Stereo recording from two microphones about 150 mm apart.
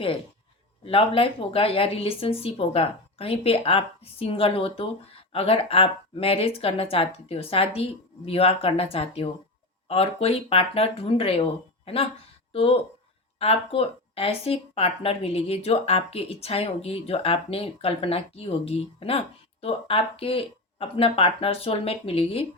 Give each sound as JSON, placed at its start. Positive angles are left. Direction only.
{"t": 0.9, "sound": "speech", "side_deg": 40}
{"t": 12.5, "sound": "speech", "side_deg": 40}